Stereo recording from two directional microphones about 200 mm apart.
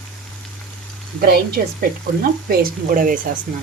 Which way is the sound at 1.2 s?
50° right (ahead or behind).